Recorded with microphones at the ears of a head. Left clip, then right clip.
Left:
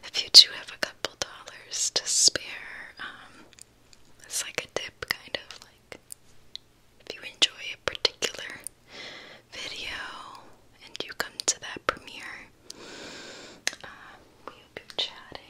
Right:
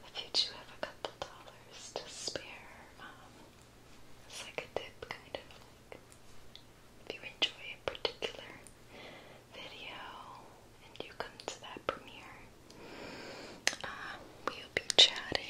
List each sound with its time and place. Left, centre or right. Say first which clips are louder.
0.0 s whispering: left 19 dB; left
7.2 s whispering: left 10 dB; left
14.6 s whispering: right 7 dB; right